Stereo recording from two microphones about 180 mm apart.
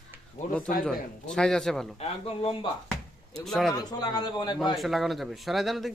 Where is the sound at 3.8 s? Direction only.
20° left (ahead or behind).